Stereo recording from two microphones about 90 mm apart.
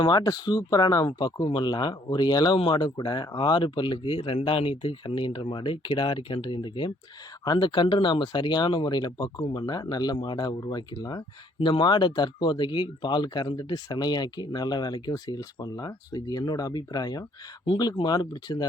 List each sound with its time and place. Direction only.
0.0 s speech: 50° left (ahead or behind)
1.5 s speech: 60° left (ahead or behind)
2.6 s speech: 60° left (ahead or behind)
7.4 s speech: 55° left (ahead or behind)